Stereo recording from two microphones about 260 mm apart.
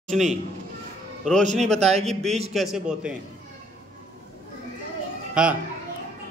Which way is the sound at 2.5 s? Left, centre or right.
Centre.